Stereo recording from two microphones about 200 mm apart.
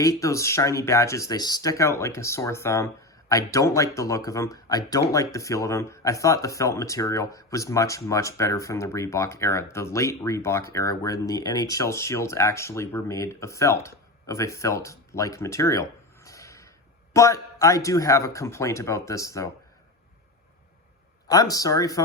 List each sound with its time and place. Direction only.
0.0 s speech: 15° left (ahead or behind)
21.2 s speech: 15° left (ahead or behind)